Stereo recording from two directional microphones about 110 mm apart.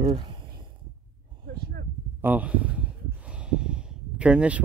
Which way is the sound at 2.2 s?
15° right (ahead or behind).